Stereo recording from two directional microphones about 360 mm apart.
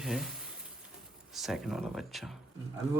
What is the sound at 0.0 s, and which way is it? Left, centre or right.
Speech, centre.